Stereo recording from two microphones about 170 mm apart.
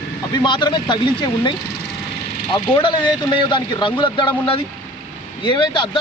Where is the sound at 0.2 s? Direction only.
25° left (ahead or behind).